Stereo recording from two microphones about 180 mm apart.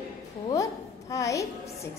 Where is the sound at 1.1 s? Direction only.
15° left (ahead or behind).